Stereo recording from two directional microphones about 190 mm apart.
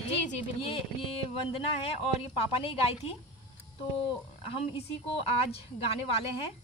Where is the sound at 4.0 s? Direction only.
30° left (ahead or behind).